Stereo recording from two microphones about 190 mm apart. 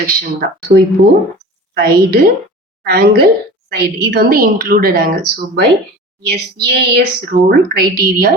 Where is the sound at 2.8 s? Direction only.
55° right (ahead or behind).